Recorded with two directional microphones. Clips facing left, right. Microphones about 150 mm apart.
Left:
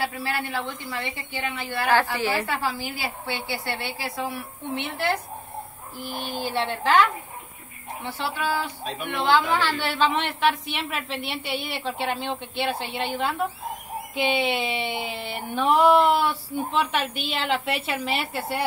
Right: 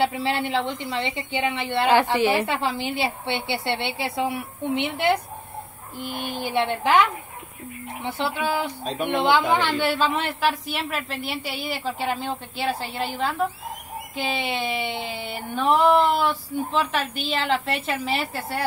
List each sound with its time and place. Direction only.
0.0 s a woman's voice: 25° right (ahead or behind)
6.0 s speech: 55° right (ahead or behind)
6.3 s a woman's voice: 20° right (ahead or behind)
9.9 s speech: 5° right (ahead or behind)